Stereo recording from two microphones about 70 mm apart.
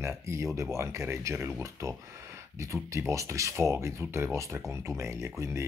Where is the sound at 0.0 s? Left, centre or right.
Right.